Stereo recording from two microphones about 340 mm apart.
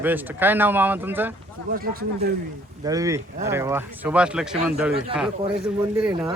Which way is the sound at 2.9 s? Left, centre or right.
Centre.